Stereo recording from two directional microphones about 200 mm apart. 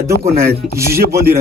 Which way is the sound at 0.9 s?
50° right (ahead or behind).